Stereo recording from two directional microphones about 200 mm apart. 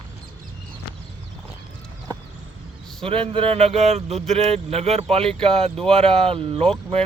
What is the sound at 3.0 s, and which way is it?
Speech, 25° right (ahead or behind).